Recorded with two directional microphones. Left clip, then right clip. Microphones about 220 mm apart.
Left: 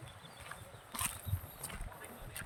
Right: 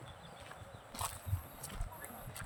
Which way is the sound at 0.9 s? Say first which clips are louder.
Left 1 dB; 5° left (ahead or behind).